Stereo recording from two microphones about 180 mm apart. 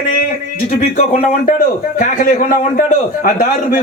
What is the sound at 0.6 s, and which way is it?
A man's voice, 40° left (ahead or behind).